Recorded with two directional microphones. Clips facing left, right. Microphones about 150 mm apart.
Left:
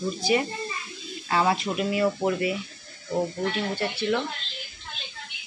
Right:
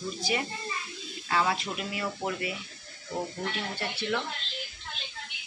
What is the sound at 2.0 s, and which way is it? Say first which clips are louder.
Speech: left 9 dB; 25° left (ahead or behind).